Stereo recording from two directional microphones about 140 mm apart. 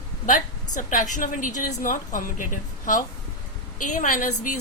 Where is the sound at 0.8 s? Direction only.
65° left (ahead or behind).